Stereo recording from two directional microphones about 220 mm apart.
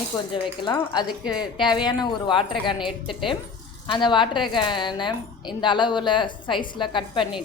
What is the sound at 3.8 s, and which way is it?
A woman's voice, 20° left (ahead or behind).